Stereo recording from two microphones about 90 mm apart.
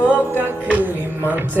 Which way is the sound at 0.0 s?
15° right (ahead or behind).